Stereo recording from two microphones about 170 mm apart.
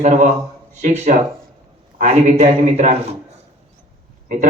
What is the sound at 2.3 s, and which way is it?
Speech, 45° right (ahead or behind).